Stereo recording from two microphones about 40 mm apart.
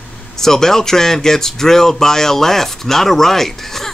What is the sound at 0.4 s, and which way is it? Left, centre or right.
Speech, centre.